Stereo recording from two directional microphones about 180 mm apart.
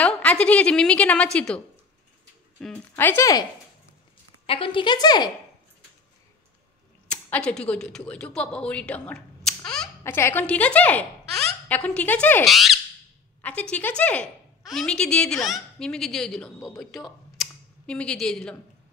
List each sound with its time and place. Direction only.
0.0 s a woman's voice: 5° left (ahead or behind)
2.6 s speech: 10° left (ahead or behind)
4.5 s a woman's voice: 30° left (ahead or behind)
7.1 s a woman's voice: 10° left (ahead or behind)
10.0 s a woman's voice: 15° left (ahead or behind)
17.4 s a sound: 5° left (ahead or behind)